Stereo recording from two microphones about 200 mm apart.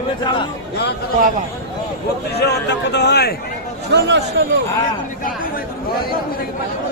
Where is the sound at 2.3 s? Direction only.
55° left (ahead or behind).